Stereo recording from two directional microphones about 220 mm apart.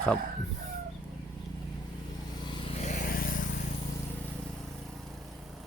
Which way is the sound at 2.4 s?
20° left (ahead or behind).